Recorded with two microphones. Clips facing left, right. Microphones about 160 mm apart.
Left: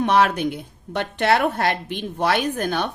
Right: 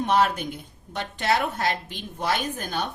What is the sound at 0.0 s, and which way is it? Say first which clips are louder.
A woman's voice: left 4 dB; 80° left.